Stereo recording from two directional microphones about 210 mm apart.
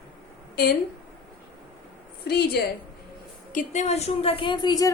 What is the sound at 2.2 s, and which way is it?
Speech, 50° left (ahead or behind).